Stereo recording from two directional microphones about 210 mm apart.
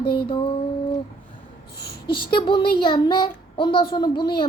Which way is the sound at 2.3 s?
25° left (ahead or behind).